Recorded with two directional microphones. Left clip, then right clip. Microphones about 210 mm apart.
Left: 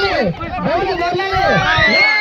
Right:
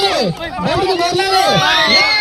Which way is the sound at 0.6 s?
50° right (ahead or behind).